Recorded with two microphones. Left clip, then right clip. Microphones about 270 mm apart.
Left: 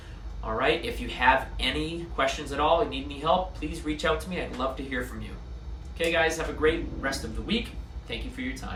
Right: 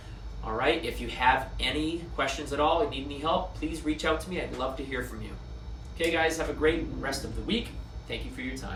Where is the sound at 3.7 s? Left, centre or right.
Centre.